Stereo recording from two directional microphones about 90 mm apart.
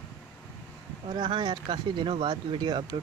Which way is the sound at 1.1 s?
60° right (ahead or behind).